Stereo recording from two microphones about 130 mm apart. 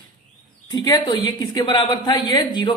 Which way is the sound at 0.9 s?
30° left (ahead or behind).